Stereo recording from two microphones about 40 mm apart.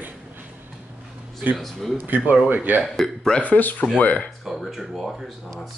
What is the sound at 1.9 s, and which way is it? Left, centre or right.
Speech, right.